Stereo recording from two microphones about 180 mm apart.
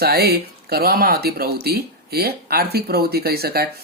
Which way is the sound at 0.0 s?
60° right (ahead or behind).